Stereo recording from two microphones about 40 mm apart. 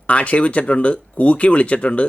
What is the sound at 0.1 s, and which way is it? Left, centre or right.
Speech, left.